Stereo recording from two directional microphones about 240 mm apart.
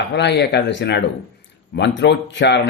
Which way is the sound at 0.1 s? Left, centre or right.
Left.